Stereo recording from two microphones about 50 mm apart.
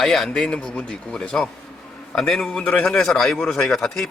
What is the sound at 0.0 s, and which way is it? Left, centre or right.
A man's voice, centre.